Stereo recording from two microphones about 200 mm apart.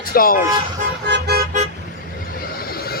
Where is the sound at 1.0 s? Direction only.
55° right (ahead or behind).